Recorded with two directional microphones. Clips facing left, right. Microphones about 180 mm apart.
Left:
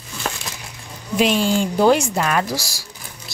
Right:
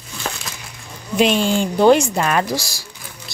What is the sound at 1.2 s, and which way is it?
A woman's voice, 5° left (ahead or behind).